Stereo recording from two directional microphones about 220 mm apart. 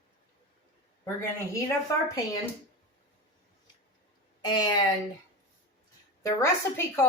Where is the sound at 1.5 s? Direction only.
15° left (ahead or behind).